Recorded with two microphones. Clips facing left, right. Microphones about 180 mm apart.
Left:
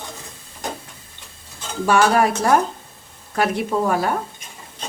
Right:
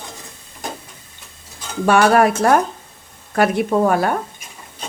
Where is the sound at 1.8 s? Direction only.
60° right (ahead or behind).